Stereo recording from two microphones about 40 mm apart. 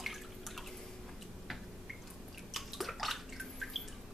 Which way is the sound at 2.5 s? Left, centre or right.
Centre.